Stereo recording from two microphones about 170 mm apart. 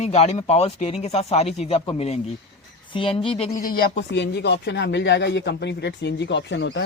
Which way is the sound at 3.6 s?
60° left (ahead or behind).